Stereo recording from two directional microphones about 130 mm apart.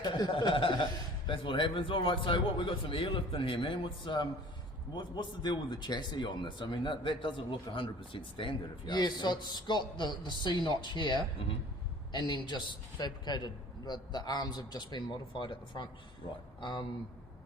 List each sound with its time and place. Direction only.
0.0 s a man's voice: 35° left (ahead or behind)